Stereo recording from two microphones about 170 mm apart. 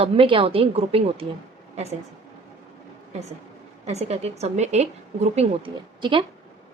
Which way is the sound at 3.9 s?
40° right (ahead or behind).